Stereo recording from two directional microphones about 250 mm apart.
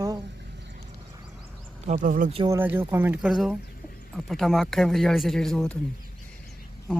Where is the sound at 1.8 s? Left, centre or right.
Right.